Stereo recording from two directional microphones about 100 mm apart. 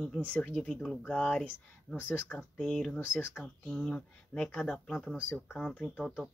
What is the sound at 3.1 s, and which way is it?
Speech, 15° left (ahead or behind).